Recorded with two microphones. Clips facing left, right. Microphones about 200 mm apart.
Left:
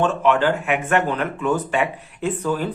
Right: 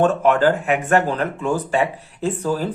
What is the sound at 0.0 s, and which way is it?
Speech, 45° right (ahead or behind).